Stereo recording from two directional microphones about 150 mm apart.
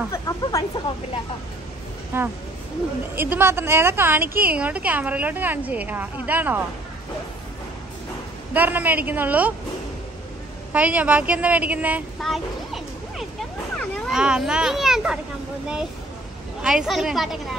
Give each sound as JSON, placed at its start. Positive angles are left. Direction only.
{"t": 0.1, "sound": "a sound", "side_deg": 20}
{"t": 2.1, "sound": "a woman's voice", "side_deg": -15}
{"t": 8.5, "sound": "a woman's voice", "side_deg": -10}
{"t": 10.7, "sound": "a woman's voice", "side_deg": -10}
{"t": 12.2, "sound": "a sound", "side_deg": 0}
{"t": 14.0, "sound": "a child's voice", "side_deg": -5}
{"t": 16.6, "sound": "a child's voice", "side_deg": -5}